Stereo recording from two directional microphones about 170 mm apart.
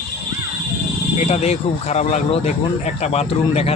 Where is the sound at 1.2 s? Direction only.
40° left (ahead or behind).